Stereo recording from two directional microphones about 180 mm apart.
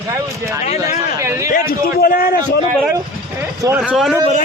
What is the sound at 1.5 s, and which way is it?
Speech, 55° left (ahead or behind).